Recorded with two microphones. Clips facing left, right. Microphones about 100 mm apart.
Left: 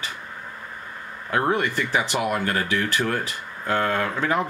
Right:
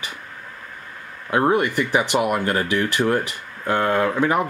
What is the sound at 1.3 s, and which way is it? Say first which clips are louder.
Speech: right 4 dB; 15° right (ahead or behind).